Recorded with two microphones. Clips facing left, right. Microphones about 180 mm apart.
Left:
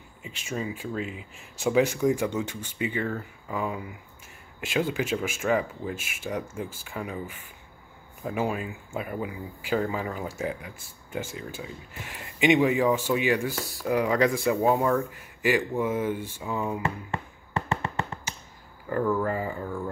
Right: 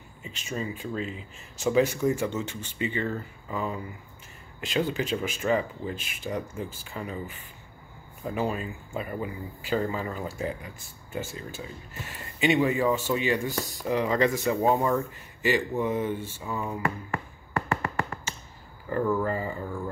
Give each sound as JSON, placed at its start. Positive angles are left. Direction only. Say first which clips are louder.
{"t": 0.2, "sound": "speech", "louder": "left 1 dB", "side_deg": 10}
{"t": 15.8, "sound": "a sound", "louder": "left 1 dB", "side_deg": 10}
{"t": 18.9, "sound": "speech", "louder": "even", "side_deg": 0}